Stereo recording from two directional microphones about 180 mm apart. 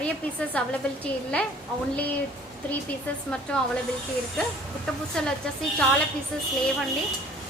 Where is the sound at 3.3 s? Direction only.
5° left (ahead or behind).